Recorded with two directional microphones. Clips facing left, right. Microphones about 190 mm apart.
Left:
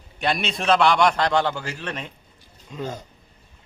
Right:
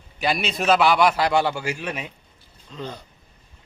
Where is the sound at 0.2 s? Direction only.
Centre (ahead or behind).